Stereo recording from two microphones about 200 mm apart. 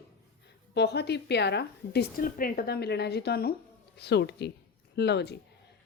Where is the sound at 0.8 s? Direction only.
55° left (ahead or behind).